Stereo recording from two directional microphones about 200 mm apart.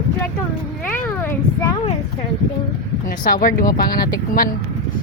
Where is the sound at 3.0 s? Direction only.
45° left (ahead or behind).